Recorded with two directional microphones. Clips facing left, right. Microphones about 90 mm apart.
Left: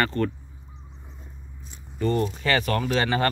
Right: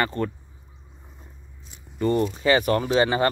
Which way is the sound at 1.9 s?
15° right (ahead or behind).